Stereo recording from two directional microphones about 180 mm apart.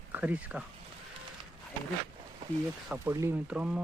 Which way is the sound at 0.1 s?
10° right (ahead or behind).